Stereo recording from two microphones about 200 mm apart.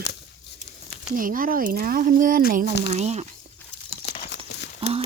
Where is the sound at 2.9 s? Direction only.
35° right (ahead or behind).